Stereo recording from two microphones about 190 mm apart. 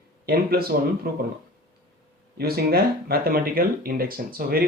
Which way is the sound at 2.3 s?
55° right (ahead or behind).